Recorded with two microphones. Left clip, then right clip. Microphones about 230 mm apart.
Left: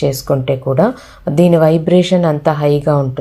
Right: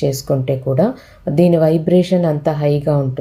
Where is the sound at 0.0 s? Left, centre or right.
Centre.